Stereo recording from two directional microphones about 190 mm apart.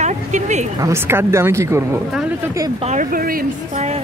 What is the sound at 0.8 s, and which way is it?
Speech, 15° right (ahead or behind).